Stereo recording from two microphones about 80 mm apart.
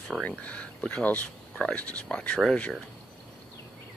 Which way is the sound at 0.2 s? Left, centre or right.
Centre.